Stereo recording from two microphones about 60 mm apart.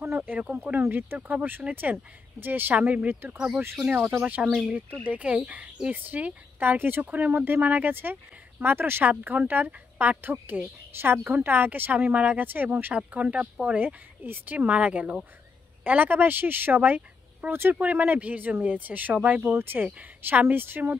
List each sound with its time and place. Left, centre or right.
0.2 s speech: right
2.7 s speech: right
4.2 s speech: right
4.5 s speech: centre
5.0 s speech: right
9.0 s speech: right
13.7 s speech: right